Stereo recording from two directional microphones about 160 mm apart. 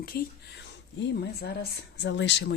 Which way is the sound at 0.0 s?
80° left.